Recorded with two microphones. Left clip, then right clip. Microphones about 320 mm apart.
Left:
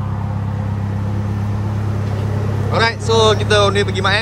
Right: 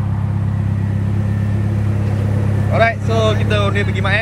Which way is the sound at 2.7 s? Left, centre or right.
Centre.